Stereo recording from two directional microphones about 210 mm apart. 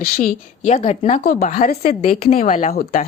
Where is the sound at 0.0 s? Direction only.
40° left (ahead or behind).